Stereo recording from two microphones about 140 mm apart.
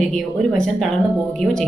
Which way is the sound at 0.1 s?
5° left (ahead or behind).